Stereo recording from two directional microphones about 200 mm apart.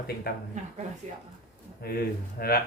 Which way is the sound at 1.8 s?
50° left (ahead or behind).